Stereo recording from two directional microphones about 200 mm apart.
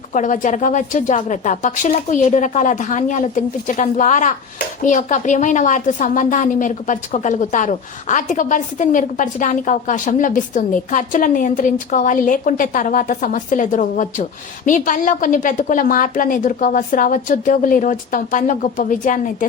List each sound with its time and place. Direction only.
0.1 s a woman's voice: 40° left (ahead or behind)